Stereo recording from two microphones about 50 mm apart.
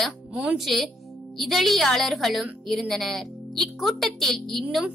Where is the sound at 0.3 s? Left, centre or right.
Right.